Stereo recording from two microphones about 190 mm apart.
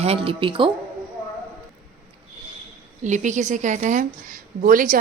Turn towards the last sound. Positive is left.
turn(degrees=-45)  # may be behind; listen again after turning